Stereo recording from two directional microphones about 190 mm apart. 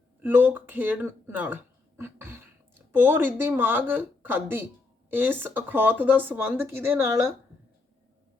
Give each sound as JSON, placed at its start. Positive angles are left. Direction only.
{"t": 0.2, "sound": "speech", "side_deg": -10}